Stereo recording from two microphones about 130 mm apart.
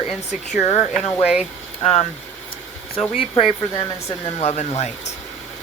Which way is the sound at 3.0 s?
45° left (ahead or behind).